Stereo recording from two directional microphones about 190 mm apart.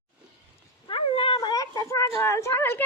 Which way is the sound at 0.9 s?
30° left (ahead or behind).